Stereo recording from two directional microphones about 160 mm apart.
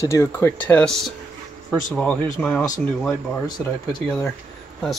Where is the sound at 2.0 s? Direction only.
5° left (ahead or behind).